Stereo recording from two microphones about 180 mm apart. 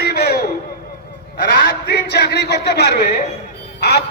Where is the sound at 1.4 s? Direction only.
65° left (ahead or behind).